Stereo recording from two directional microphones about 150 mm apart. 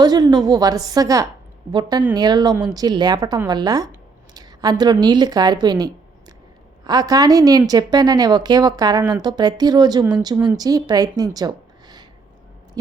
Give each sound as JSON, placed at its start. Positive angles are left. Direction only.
{"t": 0.0, "sound": "a woman's voice", "side_deg": -25}